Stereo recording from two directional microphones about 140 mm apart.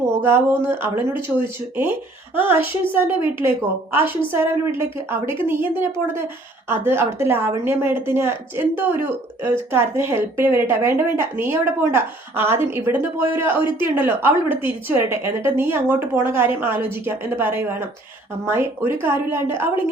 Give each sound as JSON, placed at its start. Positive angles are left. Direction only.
{"t": 0.0, "sound": "a woman's voice", "side_deg": -15}
{"t": 4.4, "sound": "a woman's voice", "side_deg": -15}